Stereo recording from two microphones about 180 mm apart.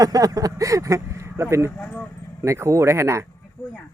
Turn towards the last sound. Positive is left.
turn(degrees=-15)  # may be behind; listen again after turning